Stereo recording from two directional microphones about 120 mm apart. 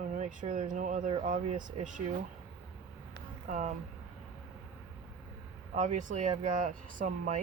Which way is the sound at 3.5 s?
90° right.